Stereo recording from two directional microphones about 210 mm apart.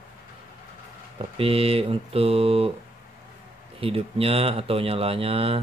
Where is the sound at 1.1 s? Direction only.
25° right (ahead or behind).